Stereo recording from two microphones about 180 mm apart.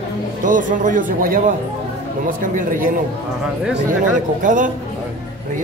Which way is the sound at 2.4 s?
50° right (ahead or behind).